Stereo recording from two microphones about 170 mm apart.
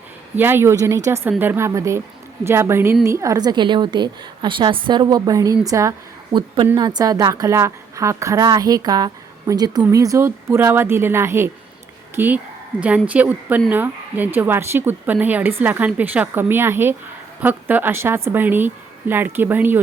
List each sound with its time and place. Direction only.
0.3 s a woman's voice: 15° right (ahead or behind)
6.3 s a woman's voice: 30° right (ahead or behind); by 19.8 s 10° right (ahead or behind)